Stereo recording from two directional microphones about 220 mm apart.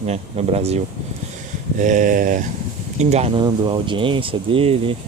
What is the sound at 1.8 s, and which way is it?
Speech, 35° right (ahead or behind).